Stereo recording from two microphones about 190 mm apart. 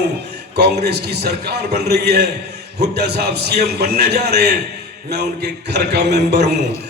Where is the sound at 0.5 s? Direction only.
55° right (ahead or behind).